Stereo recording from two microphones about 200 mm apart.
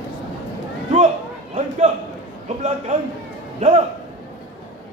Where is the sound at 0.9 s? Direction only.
35° right (ahead or behind).